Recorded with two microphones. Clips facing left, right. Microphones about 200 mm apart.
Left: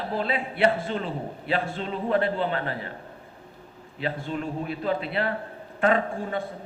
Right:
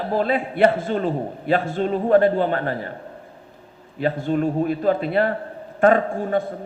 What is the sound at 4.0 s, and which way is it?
A man's voice, 45° right (ahead or behind).